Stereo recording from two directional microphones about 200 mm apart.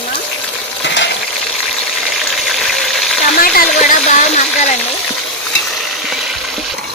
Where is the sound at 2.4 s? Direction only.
Centre (ahead or behind).